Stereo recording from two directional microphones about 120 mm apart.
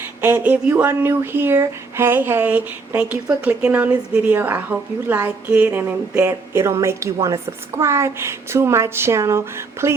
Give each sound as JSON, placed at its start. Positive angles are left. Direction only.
{"t": 0.2, "sound": "speech", "side_deg": -15}